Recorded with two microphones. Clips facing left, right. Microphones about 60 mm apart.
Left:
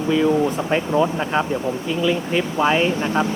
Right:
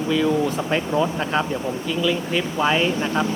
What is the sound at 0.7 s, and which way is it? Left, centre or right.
Speech, centre.